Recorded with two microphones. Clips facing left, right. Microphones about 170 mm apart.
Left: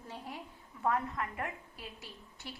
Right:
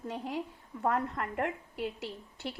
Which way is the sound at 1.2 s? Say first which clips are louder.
Right 5 dB; 65° right (ahead or behind).